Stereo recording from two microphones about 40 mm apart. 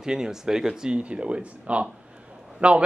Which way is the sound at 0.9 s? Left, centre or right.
Right.